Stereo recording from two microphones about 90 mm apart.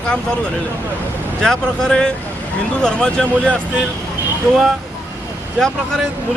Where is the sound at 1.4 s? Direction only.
10° left (ahead or behind).